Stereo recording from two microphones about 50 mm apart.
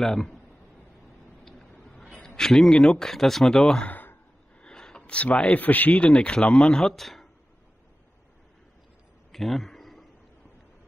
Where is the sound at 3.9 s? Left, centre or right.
Left.